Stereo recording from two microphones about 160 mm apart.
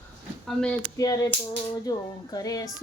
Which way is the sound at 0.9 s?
20° left (ahead or behind).